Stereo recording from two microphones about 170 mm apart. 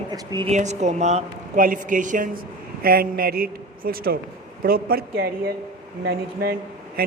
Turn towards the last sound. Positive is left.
turn(degrees=-60)  # may be behind; listen again after turning